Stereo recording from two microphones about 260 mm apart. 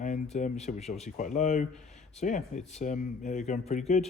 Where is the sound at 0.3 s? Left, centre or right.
Left.